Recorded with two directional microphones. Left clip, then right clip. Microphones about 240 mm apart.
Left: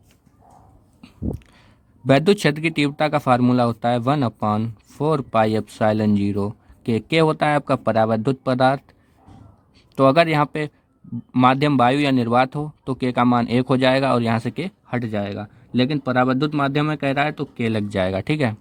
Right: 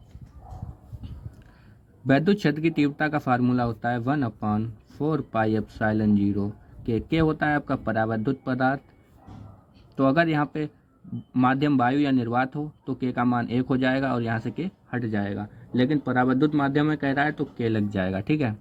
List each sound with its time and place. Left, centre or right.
2.0 s speech: left
9.9 s speech: left
17.7 s speech: left